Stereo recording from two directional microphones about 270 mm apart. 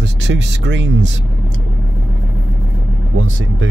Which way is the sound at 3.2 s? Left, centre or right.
Right.